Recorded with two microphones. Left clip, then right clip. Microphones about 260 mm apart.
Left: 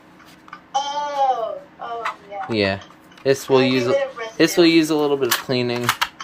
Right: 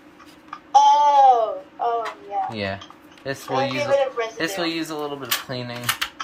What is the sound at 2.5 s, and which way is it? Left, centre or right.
Speech, left.